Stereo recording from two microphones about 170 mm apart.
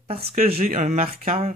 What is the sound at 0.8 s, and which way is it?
Speech, 40° right (ahead or behind).